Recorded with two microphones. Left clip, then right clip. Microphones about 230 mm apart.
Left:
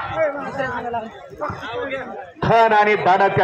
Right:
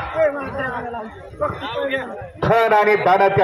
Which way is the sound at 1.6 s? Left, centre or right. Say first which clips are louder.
Right 3 dB; right.